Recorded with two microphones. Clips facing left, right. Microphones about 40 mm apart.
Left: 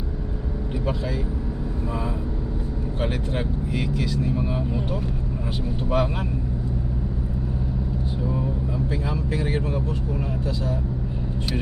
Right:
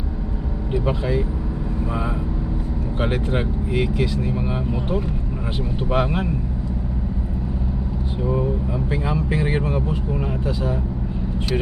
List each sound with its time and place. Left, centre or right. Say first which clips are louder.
0.9 s speech: right 5 dB; right
3.0 s speech: right 5 dB; right
8.9 s speech: right 4 dB; right